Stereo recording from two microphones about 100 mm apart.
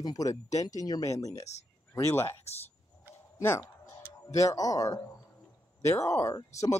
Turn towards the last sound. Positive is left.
turn(degrees=30)  # may be behind; listen again after turning